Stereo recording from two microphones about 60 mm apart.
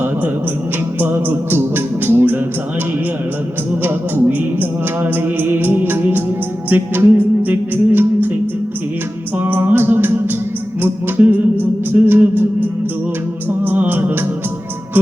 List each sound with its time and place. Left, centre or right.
0.9 s music: right
3.7 s music: right
9.4 s music: right
13.7 s music: right